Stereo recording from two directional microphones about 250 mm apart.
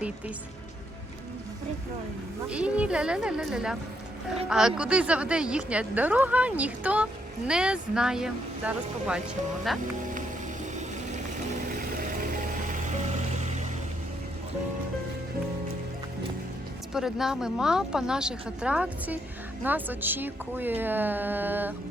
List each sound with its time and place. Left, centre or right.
2.5 s speech: centre
10.1 s music: right
16.9 s a woman's voice: centre